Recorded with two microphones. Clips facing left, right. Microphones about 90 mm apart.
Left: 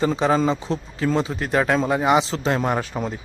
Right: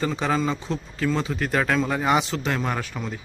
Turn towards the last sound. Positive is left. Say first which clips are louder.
# left 5 dB
turn(degrees=30)  # may be behind; listen again after turning